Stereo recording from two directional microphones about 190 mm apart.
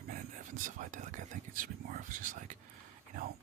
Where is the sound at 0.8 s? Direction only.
40° right (ahead or behind).